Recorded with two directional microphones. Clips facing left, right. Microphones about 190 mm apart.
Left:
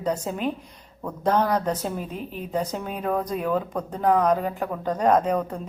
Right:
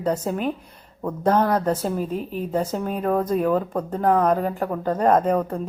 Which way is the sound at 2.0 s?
40° right (ahead or behind).